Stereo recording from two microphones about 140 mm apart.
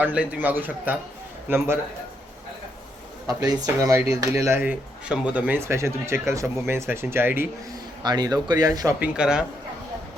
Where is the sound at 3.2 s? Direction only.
25° right (ahead or behind).